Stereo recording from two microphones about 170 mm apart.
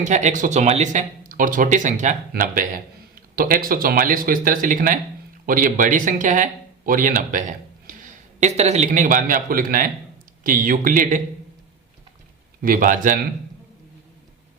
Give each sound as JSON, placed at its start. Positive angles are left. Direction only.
{"t": 0.0, "sound": "speech", "side_deg": -45}
{"t": 12.6, "sound": "speech", "side_deg": -55}